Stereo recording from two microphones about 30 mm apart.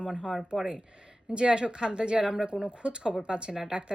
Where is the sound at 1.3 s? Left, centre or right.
Right.